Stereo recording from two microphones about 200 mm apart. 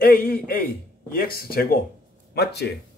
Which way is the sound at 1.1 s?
50° left (ahead or behind).